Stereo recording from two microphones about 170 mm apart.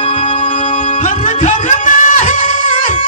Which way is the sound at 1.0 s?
50° left (ahead or behind).